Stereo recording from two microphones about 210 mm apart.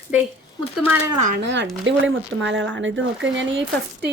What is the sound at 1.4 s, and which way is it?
A woman's voice, 55° right (ahead or behind).